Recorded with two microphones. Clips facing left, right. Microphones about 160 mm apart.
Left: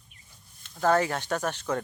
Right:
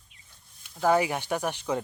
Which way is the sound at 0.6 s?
10° right (ahead or behind).